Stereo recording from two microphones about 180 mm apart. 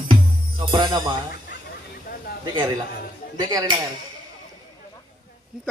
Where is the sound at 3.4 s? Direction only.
20° right (ahead or behind).